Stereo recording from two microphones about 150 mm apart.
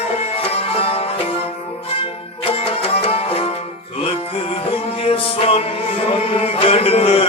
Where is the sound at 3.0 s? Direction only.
40° left (ahead or behind).